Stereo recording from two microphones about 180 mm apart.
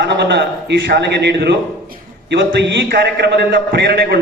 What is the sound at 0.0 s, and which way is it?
A man's voice, 75° right (ahead or behind).